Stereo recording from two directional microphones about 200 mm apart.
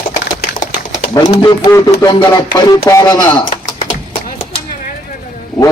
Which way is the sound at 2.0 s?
15° left (ahead or behind).